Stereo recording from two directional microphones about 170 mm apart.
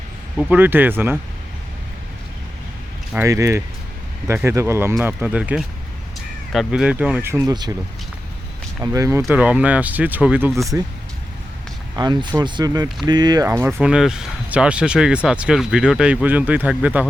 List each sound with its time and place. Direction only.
0.3 s speech: 10° right (ahead or behind)
3.2 s speech: 20° right (ahead or behind)
8.8 s speech: 20° right (ahead or behind)
11.9 s speech: 25° right (ahead or behind); by 17.1 s 5° right (ahead or behind)